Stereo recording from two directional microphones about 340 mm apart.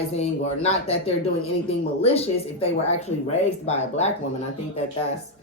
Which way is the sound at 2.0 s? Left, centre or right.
Centre.